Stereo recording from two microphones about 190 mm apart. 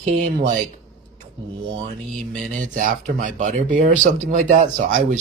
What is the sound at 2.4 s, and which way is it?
Speech, 45° right (ahead or behind).